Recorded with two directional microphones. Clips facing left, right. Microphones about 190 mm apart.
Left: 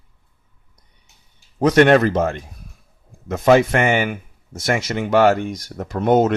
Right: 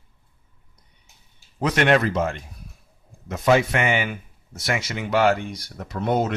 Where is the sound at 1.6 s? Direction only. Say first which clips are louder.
Left 7 dB; 45° left (ahead or behind).